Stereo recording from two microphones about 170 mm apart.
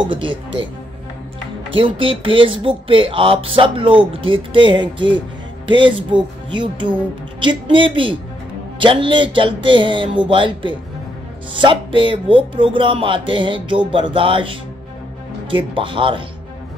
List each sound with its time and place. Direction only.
0.0 s speech: 30° right (ahead or behind)
1.8 s speech: 30° right (ahead or behind)